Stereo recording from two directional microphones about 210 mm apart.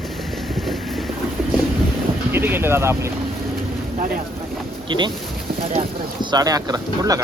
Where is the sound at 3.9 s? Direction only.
45° right (ahead or behind).